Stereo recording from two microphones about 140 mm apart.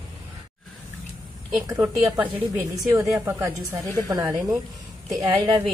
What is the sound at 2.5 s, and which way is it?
A woman's voice, 25° right (ahead or behind).